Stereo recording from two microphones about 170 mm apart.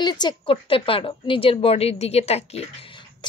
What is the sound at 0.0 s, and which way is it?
A woman's voice, 25° left (ahead or behind).